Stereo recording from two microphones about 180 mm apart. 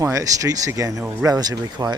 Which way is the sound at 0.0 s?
15° right (ahead or behind).